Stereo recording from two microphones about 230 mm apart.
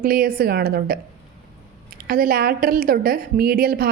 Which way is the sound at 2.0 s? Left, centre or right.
Right.